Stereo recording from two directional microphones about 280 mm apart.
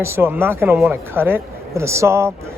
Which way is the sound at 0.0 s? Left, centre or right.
Centre.